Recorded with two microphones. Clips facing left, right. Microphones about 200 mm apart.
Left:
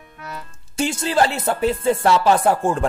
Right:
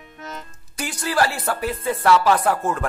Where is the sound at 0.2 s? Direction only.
20° right (ahead or behind).